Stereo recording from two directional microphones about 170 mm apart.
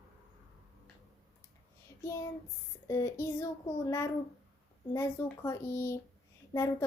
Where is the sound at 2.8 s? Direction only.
15° left (ahead or behind).